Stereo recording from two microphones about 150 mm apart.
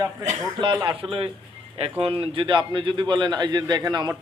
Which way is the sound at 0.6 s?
30° right (ahead or behind).